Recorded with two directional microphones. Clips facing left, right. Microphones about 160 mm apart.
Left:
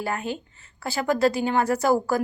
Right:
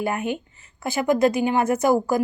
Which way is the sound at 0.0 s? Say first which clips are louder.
Right 4 dB; 20° right (ahead or behind).